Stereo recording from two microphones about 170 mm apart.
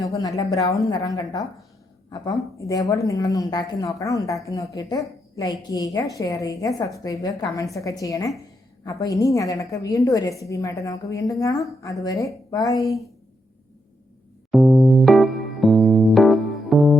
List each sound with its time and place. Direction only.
0.0 s a woman's voice: 20° left (ahead or behind)
2.6 s a woman's voice: 20° left (ahead or behind)
14.5 s electric piano: centre (ahead or behind)